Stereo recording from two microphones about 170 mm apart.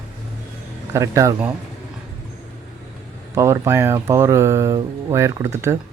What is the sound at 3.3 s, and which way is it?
Speech, 15° right (ahead or behind).